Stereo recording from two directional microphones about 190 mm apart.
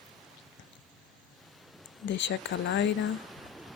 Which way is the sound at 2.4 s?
75° left (ahead or behind).